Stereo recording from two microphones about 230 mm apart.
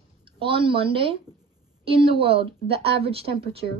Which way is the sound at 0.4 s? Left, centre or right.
Right.